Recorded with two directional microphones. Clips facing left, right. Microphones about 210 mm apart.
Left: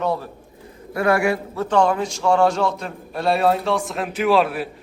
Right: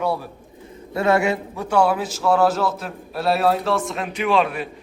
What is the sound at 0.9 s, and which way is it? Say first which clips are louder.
Speech: even; 25° right (ahead or behind).